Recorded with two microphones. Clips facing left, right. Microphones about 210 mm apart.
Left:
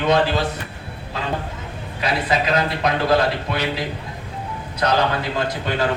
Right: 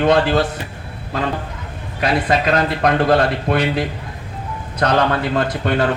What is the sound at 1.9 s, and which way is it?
Speech, 50° right (ahead or behind).